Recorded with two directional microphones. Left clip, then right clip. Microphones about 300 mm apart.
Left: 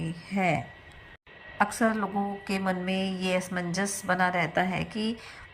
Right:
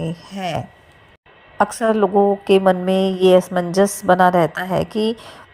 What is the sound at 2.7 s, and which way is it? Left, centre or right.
Speech, right.